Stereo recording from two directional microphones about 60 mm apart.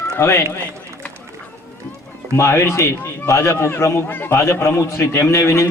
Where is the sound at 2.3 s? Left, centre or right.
Left.